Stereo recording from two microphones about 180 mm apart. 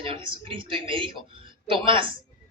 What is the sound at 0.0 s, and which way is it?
A woman's voice, 30° right (ahead or behind).